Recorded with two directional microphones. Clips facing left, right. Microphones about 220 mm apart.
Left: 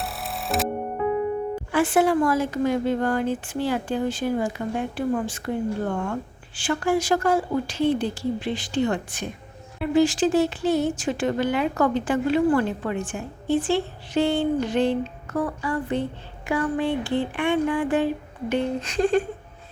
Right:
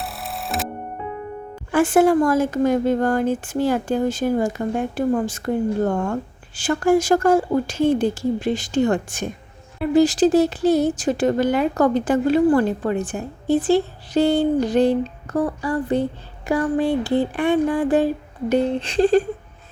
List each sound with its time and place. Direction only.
0.0 s music: centre (ahead or behind)
1.7 s a woman's voice: 45° right (ahead or behind)